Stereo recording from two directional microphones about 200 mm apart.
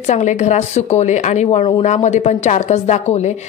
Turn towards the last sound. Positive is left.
turn(degrees=35)  # may be behind; listen again after turning